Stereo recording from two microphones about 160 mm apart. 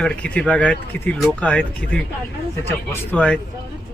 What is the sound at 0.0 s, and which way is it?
Speech, 5° left (ahead or behind).